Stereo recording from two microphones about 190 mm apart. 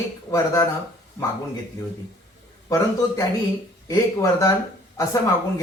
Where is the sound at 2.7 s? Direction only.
15° left (ahead or behind).